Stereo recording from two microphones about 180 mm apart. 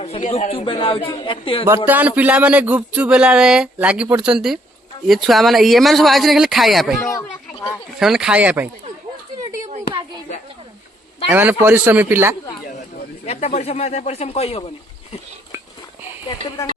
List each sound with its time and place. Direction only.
0.0 s speech: 35° left (ahead or behind)
1.6 s speech: 10° right (ahead or behind)
11.3 s speech: 10° right (ahead or behind)
13.2 s speech: 35° left (ahead or behind)